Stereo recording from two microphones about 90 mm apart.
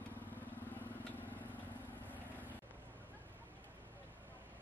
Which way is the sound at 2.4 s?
20° right (ahead or behind).